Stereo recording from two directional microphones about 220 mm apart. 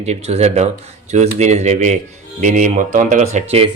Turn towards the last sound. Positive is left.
turn(degrees=-30)  # may be behind; listen again after turning